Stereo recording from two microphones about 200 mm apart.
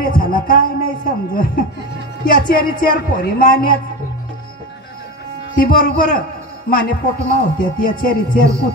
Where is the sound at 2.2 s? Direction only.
45° left (ahead or behind).